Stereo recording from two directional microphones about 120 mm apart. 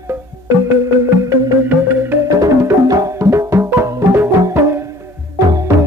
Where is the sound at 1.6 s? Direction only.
15° right (ahead or behind).